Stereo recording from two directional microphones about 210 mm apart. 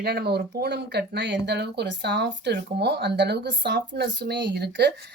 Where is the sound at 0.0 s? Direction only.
50° right (ahead or behind).